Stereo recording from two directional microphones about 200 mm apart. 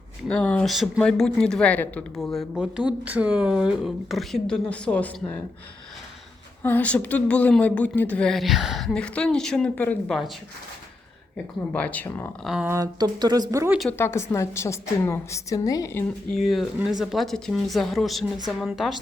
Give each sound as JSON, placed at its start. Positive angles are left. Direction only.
{"t": 0.3, "sound": "speech", "side_deg": 5}
{"t": 6.6, "sound": "speech", "side_deg": 10}
{"t": 11.7, "sound": "a woman's voice", "side_deg": 5}
{"t": 12.5, "sound": "speech", "side_deg": -5}
{"t": 12.7, "sound": "speech", "side_deg": -20}
{"t": 14.0, "sound": "a woman's voice", "side_deg": 15}
{"t": 16.4, "sound": "speech", "side_deg": 0}